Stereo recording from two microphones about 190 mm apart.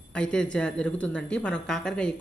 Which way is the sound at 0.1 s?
5° left (ahead or behind).